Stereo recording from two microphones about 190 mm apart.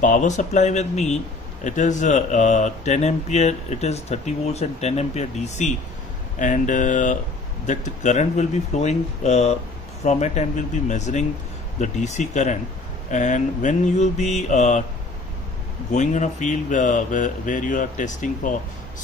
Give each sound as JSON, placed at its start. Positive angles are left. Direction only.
{"t": 0.0, "sound": "a man's voice", "side_deg": 40}
{"t": 15.9, "sound": "a man's voice", "side_deg": 40}